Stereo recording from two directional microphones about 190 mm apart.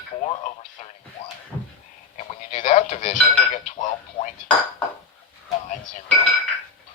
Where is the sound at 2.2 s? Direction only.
40° left (ahead or behind).